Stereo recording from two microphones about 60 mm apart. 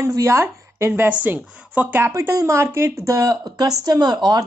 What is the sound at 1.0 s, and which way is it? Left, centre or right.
Speech, right.